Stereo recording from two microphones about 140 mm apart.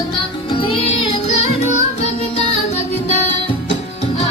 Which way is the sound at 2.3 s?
55° left (ahead or behind).